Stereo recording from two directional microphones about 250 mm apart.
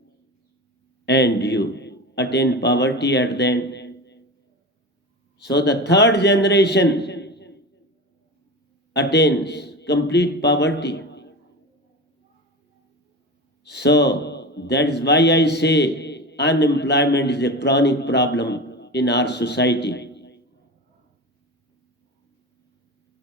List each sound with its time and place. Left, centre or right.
1.0 s a man's voice: left
5.4 s a man's voice: left
8.9 s a man's voice: left
13.7 s a man's voice: left